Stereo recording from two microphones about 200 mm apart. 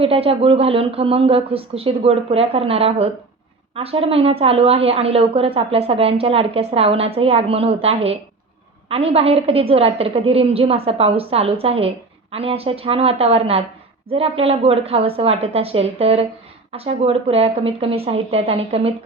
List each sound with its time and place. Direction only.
0.0 s a woman's voice: 30° right (ahead or behind)